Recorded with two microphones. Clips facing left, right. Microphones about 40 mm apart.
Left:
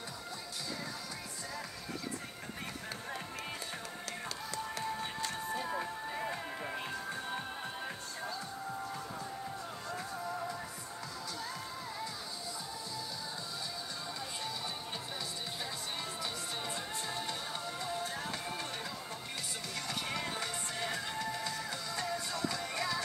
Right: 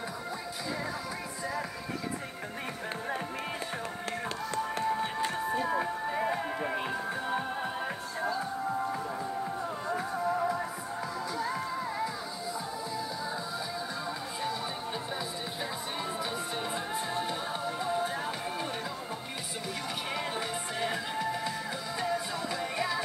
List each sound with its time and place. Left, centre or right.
4.8 s music: right
16.7 s music: centre
20.2 s music: centre